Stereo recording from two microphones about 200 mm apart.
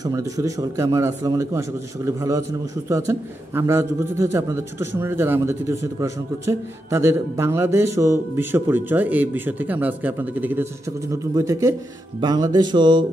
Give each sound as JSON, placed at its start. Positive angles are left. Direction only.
{"t": 0.0, "sound": "a man's voice", "side_deg": -15}
{"t": 12.2, "sound": "music", "side_deg": -20}